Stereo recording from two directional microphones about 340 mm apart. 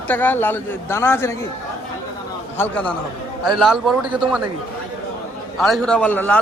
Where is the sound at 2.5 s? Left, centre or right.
Centre.